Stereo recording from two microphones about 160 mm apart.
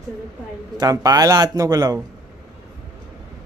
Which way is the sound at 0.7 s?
25° right (ahead or behind).